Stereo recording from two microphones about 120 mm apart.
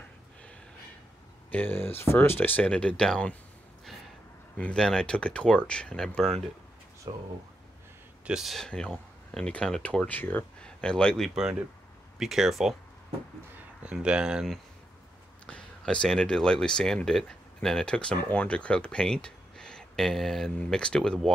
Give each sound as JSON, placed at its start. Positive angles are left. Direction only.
{"t": 1.5, "sound": "speech", "side_deg": 15}
{"t": 4.6, "sound": "speech", "side_deg": 10}
{"t": 7.1, "sound": "speech", "side_deg": -40}
{"t": 8.3, "sound": "speech", "side_deg": -5}
{"t": 13.8, "sound": "speech", "side_deg": -10}
{"t": 15.4, "sound": "speech", "side_deg": 10}